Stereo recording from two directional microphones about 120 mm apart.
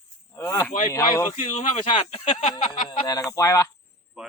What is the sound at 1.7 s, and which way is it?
Speech, 55° left (ahead or behind).